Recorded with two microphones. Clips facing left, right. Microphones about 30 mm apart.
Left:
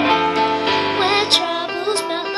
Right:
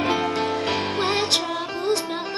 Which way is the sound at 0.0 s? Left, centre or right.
Left.